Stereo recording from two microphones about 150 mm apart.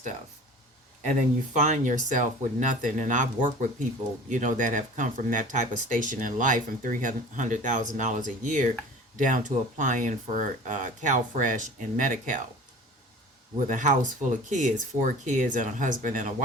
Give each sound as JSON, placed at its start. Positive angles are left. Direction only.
{"t": 1.5, "sound": "speech", "side_deg": -55}
{"t": 13.7, "sound": "speech", "side_deg": -60}